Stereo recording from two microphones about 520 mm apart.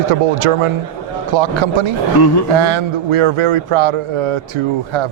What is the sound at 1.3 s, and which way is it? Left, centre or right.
A man's voice, right.